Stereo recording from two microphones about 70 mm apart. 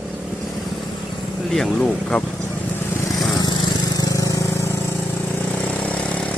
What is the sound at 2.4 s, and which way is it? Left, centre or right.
Vehicle, left.